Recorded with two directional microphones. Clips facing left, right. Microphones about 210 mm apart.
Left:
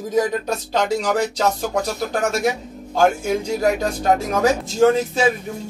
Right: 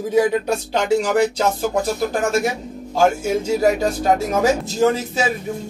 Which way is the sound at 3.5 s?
5° right (ahead or behind).